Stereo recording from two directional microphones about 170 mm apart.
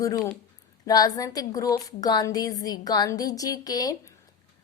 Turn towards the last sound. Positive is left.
turn(degrees=20)  # may be behind; listen again after turning